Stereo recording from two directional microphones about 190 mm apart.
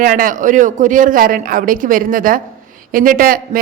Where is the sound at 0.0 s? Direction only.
45° right (ahead or behind).